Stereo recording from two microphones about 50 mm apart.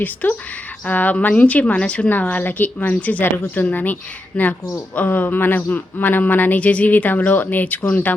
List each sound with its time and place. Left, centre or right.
0.0 s speech: left
4.4 s speech: left
4.9 s speech: left